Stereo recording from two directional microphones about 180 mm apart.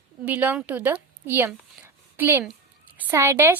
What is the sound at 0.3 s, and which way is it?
A woman's voice, 10° right (ahead or behind).